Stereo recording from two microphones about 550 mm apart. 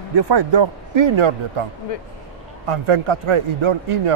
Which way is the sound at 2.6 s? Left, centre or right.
Right.